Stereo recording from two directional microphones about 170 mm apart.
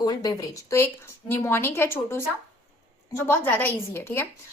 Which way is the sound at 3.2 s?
10° left (ahead or behind).